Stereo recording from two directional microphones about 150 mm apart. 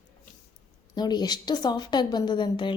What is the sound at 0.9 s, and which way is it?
A woman's voice, 30° left (ahead or behind).